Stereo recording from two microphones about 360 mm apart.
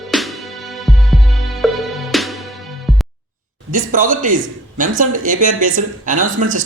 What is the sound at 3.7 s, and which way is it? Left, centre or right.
Speech, right.